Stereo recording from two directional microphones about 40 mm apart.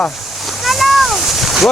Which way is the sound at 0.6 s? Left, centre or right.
Centre.